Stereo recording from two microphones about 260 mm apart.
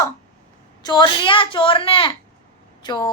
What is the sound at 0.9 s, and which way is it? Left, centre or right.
A woman's voice, centre.